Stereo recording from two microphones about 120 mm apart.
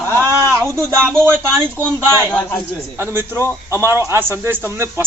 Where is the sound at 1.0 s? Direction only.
20° right (ahead or behind).